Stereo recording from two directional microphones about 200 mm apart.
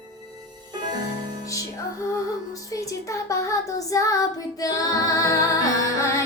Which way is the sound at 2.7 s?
15° left (ahead or behind).